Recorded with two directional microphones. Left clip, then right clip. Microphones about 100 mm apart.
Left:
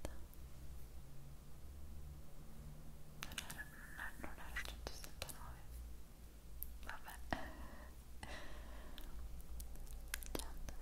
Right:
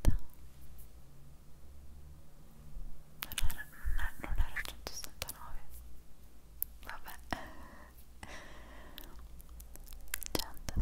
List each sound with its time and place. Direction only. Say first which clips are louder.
3.2 s whispering: right 7 dB; 30° right (ahead or behind)
6.8 s whispering: right 5 dB; 25° right (ahead or behind)
10.1 s whispering: right 9 dB; 30° right (ahead or behind)